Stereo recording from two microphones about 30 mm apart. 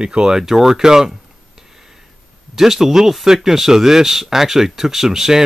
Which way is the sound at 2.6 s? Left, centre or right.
Centre.